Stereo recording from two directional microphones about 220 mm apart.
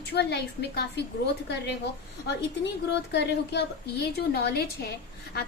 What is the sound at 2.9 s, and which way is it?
A woman's voice, 50° left (ahead or behind).